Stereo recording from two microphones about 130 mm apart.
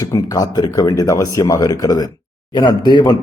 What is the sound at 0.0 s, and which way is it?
A man's voice, 25° left (ahead or behind).